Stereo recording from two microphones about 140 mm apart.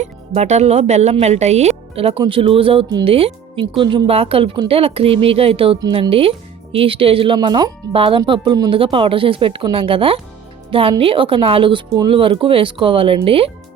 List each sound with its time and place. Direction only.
0.0 s speech: 55° right (ahead or behind)